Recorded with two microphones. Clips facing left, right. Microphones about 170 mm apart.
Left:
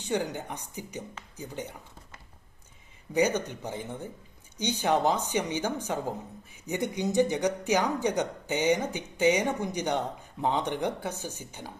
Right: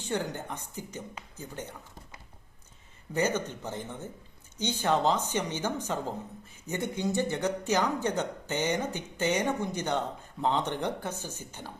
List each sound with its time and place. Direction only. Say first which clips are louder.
0.0 s a woman's voice: left 2 dB; 15° left (ahead or behind)
3.1 s a woman's voice: left 3 dB; 15° left (ahead or behind)